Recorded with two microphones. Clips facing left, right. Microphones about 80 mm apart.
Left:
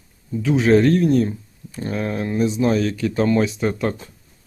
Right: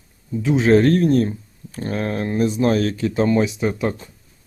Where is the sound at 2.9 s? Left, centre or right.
Right.